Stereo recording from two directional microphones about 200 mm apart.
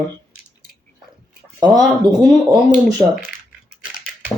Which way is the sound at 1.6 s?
20° right (ahead or behind).